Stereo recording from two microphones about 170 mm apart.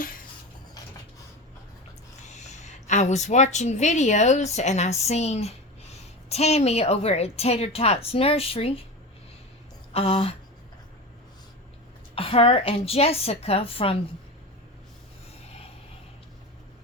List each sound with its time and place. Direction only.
2.3 s a woman's voice: 45° left (ahead or behind)
9.9 s a woman's voice: 35° left (ahead or behind)
12.1 s a woman's voice: 35° left (ahead or behind)